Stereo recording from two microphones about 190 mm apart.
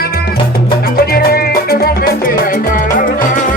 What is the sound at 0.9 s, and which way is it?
Music, 50° left (ahead or behind).